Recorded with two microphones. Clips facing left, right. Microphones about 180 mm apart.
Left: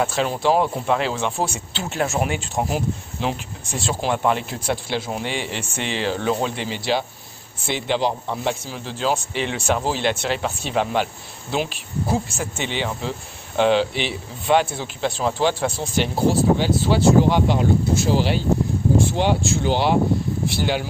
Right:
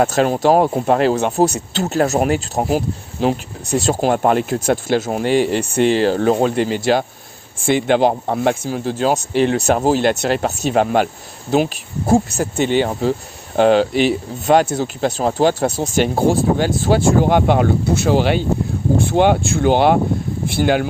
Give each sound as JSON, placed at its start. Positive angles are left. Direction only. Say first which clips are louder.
{"t": 0.0, "sound": "speech", "louder": "right 6 dB", "side_deg": -45}